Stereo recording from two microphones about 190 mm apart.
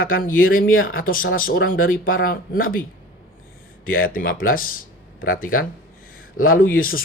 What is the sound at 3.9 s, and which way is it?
Speech, 50° left (ahead or behind).